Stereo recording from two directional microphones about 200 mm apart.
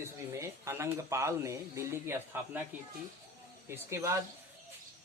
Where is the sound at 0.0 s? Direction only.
15° right (ahead or behind).